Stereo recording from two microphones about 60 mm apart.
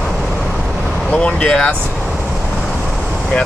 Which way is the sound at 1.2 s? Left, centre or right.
Centre.